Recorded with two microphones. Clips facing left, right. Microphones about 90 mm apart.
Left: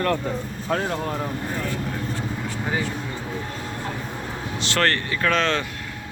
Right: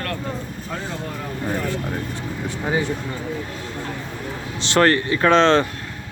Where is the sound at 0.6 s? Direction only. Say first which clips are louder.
Left 7 dB; 45° left (ahead or behind).